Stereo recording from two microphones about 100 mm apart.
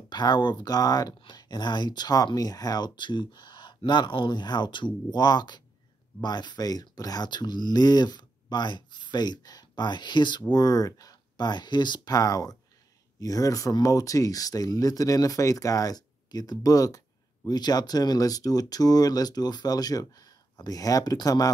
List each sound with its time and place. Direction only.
0.1 s speech: 45° left (ahead or behind)